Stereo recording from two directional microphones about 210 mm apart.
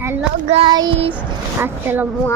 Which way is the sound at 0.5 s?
20° right (ahead or behind).